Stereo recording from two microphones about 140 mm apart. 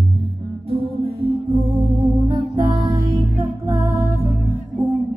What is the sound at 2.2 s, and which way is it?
Music, 25° right (ahead or behind).